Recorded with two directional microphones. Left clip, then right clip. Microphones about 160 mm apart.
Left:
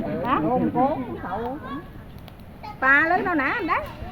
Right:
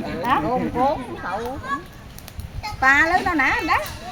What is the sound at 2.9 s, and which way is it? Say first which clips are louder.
Speech: right 2 dB; 90° right.